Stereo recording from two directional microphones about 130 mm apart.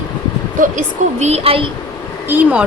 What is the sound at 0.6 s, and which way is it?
Speech, 65° right (ahead or behind).